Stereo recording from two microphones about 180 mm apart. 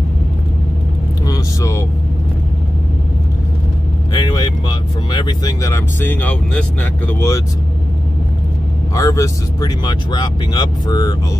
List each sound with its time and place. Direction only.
1.2 s speech: 20° left (ahead or behind)
4.1 s speech: 25° left (ahead or behind)
8.9 s speech: 20° left (ahead or behind)